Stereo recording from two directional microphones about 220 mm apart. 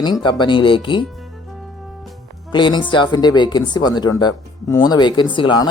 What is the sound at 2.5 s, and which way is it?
A man's voice, 20° left (ahead or behind).